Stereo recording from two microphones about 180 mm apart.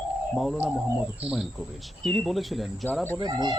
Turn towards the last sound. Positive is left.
turn(degrees=-25)  # may be behind; listen again after turning